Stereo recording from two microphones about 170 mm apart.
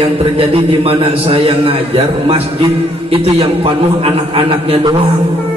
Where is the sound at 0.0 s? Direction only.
35° right (ahead or behind).